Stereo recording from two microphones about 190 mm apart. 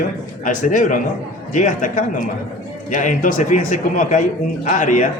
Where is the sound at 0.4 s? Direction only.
40° left (ahead or behind).